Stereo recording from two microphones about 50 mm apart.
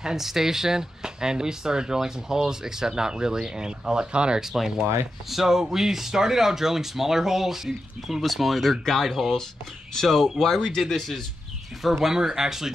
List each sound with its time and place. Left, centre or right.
0.0 s speech: centre